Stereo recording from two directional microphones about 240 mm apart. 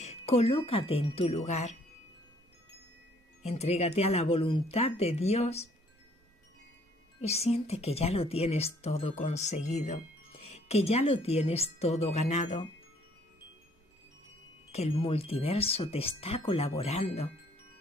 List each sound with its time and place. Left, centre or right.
0.0 s speech: left
3.4 s speech: left
7.2 s speech: left
14.7 s speech: left